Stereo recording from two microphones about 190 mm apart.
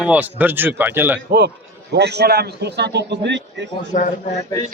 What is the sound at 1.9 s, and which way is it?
A man's voice, 60° right (ahead or behind).